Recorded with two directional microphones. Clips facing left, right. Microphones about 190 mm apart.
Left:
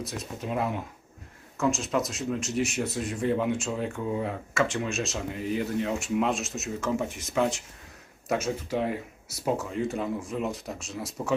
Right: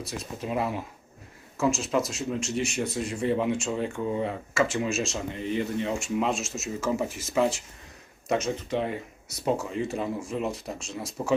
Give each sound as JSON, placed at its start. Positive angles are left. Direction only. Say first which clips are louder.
{"t": 0.0, "sound": "speech", "louder": "even", "side_deg": 0}